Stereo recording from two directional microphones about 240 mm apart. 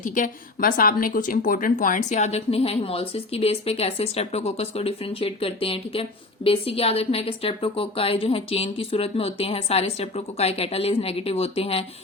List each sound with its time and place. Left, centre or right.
0.0 s a woman's voice: left